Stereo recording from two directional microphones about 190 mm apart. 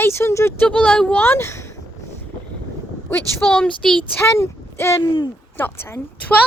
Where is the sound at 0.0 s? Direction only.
15° left (ahead or behind).